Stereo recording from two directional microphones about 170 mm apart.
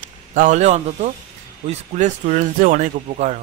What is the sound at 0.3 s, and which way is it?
Speech, 45° right (ahead or behind).